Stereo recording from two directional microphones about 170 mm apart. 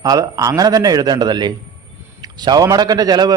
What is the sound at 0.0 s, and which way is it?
A man's voice, 20° right (ahead or behind).